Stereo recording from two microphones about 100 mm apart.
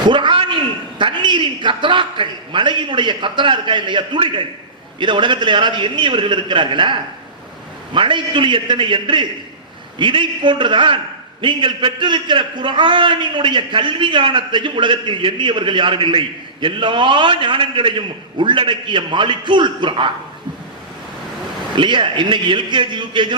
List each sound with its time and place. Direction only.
0.1 s a man's voice: 55° right (ahead or behind)
21.8 s a man's voice: 55° right (ahead or behind)